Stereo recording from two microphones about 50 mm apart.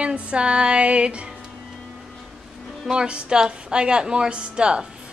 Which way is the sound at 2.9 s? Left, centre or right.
Centre.